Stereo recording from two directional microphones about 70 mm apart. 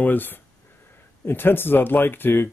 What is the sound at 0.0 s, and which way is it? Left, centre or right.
Speech, left.